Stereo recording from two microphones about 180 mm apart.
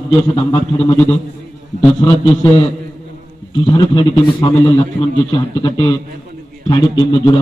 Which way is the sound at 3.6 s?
25° left (ahead or behind).